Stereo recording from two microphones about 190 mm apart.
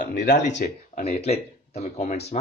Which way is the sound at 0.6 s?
45° left (ahead or behind).